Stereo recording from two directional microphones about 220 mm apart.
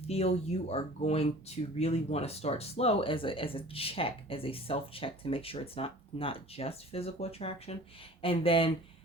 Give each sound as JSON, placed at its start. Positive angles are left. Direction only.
{"t": 0.1, "sound": "speech", "side_deg": 30}